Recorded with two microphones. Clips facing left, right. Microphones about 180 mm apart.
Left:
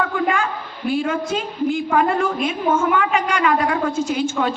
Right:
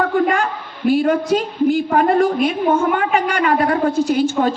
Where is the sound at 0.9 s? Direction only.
40° right (ahead or behind).